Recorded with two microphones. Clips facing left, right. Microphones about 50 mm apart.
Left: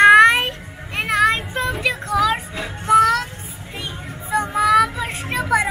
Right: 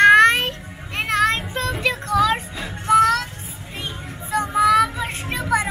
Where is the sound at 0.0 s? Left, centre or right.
Centre.